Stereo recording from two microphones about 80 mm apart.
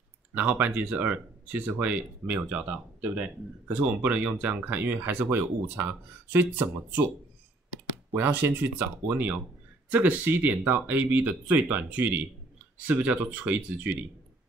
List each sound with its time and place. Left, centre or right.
0.3 s speech: right
3.6 s speech: right
8.1 s speech: right